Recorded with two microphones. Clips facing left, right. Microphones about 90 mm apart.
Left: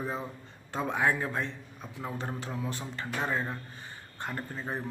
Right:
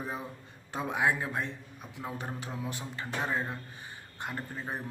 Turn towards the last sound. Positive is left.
turn(degrees=-10)  # may be behind; listen again after turning